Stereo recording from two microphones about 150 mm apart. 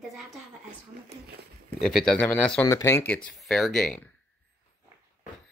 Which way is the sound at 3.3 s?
5° left (ahead or behind).